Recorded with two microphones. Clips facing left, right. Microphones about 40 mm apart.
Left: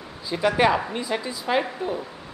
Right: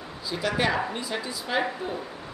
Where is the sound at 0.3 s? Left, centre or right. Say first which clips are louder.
Left 6 dB; centre.